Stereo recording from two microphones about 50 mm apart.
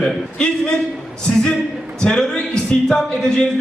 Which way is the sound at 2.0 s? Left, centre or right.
Centre.